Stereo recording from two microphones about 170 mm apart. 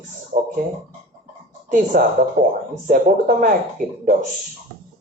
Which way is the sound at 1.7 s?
55° right (ahead or behind).